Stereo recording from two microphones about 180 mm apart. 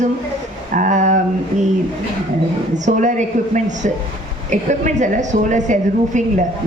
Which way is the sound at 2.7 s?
45° right (ahead or behind).